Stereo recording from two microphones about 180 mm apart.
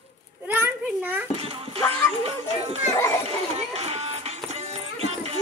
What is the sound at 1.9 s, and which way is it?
Music, 35° right (ahead or behind).